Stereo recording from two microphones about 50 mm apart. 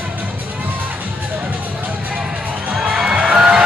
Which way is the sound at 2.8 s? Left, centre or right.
Centre.